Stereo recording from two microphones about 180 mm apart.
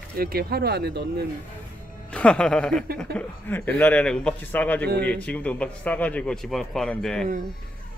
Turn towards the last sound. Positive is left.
turn(degrees=0)  # may be behind; listen again after turning